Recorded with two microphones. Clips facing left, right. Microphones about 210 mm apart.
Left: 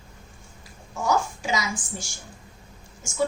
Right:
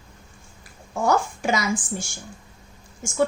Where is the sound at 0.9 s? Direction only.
55° right (ahead or behind).